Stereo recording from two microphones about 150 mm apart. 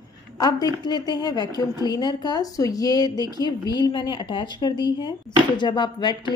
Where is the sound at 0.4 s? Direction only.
25° left (ahead or behind).